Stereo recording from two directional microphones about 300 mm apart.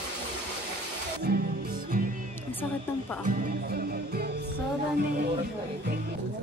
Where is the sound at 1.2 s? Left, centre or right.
Right.